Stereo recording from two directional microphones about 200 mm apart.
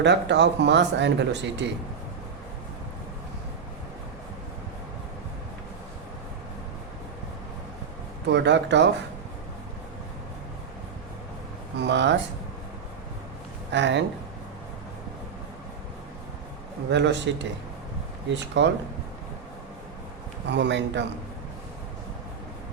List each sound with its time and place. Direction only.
0.0 s speech: 60° right (ahead or behind)
8.3 s speech: 60° right (ahead or behind)
11.8 s speech: 60° right (ahead or behind)
13.7 s speech: 60° right (ahead or behind)
16.9 s speech: 60° right (ahead or behind)
20.5 s speech: 60° right (ahead or behind)